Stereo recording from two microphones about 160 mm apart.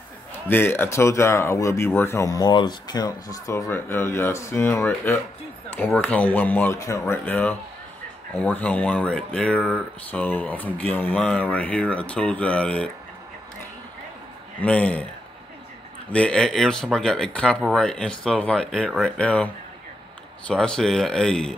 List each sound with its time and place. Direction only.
0.3 s speech: 15° left (ahead or behind)
14.6 s speech: 10° left (ahead or behind)
16.1 s speech: 5° left (ahead or behind)